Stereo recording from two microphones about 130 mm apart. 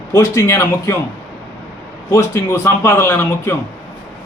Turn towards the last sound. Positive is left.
turn(degrees=20)  # may be behind; listen again after turning